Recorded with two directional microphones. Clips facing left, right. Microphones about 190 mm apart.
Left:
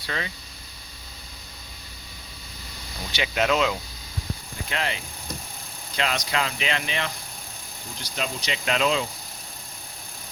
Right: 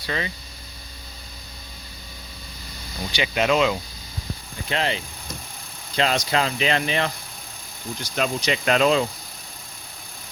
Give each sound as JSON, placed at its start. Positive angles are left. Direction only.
{"t": 3.1, "sound": "speech", "side_deg": 0}
{"t": 4.7, "sound": "speech", "side_deg": -30}
{"t": 6.0, "sound": "speech", "side_deg": -35}
{"t": 8.1, "sound": "speech", "side_deg": -50}